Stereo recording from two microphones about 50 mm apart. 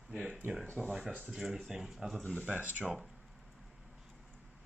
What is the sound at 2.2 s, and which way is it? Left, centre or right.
Speech, left.